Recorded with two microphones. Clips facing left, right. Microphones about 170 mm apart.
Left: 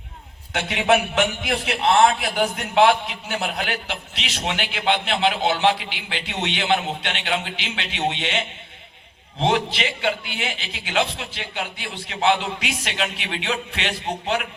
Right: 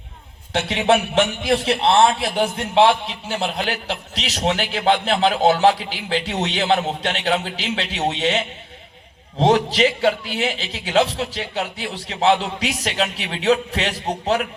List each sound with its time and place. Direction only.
0.5 s a man's voice: 30° right (ahead or behind)